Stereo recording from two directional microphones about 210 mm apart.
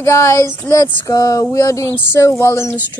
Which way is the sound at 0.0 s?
15° left (ahead or behind).